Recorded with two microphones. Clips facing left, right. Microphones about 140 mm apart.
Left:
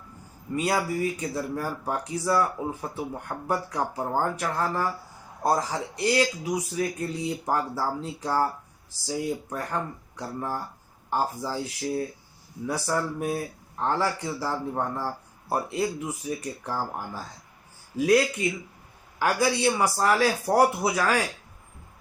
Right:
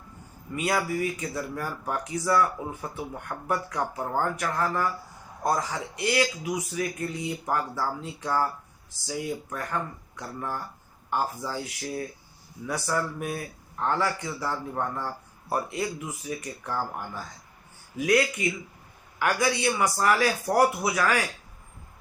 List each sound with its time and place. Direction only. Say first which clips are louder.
0.5 s speech: left 1 dB; 30° left (ahead or behind)